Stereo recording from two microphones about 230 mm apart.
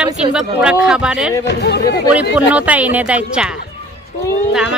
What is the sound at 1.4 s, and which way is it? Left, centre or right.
Speech, left.